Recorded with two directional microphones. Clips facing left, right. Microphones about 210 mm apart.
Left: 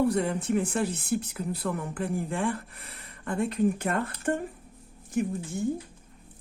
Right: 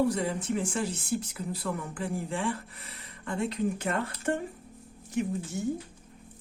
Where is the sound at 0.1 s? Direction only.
60° left (ahead or behind).